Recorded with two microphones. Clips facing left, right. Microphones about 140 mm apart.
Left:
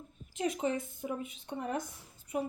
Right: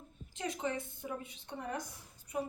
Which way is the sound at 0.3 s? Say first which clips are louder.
Left 5 dB; 20° left (ahead or behind).